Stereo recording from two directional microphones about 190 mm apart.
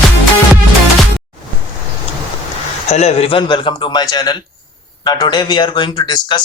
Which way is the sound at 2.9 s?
35° left (ahead or behind).